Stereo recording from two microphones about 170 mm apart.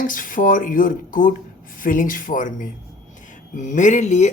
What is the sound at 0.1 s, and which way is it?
Speech, 55° left (ahead or behind).